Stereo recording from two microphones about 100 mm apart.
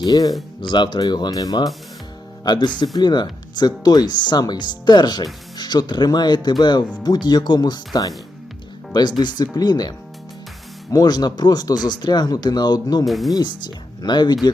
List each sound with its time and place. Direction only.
0.0 s speech: 40° left (ahead or behind)
0.6 s speech: 55° left (ahead or behind)
10.9 s speech: 40° left (ahead or behind)
13.1 s speech: centre (ahead or behind)
13.3 s speech: 45° left (ahead or behind)